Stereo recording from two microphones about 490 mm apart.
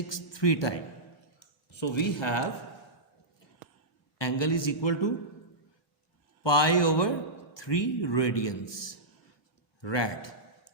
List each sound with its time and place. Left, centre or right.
0.1 s speech: left
1.7 s a man's voice: left
4.2 s a man's voice: left
6.4 s a man's voice: left